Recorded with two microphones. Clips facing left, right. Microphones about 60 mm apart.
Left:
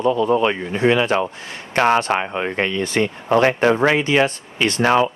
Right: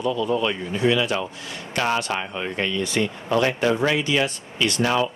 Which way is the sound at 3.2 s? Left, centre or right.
Left.